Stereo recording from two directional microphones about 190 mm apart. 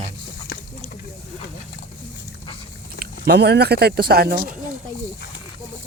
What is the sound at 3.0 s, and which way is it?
Speech, 60° right (ahead or behind).